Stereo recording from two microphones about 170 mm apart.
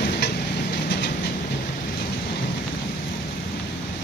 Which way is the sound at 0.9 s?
80° left.